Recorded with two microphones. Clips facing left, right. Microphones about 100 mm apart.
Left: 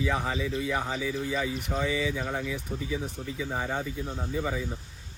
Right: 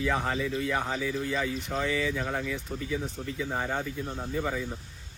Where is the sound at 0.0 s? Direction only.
Centre (ahead or behind).